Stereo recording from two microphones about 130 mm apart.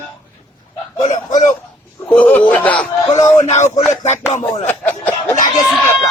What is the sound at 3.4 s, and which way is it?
Music, 60° left (ahead or behind).